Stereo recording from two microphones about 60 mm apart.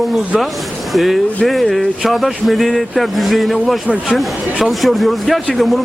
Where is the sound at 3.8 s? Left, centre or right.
Centre.